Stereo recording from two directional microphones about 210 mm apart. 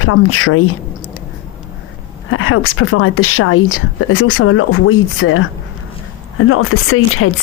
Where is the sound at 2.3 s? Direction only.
80° left.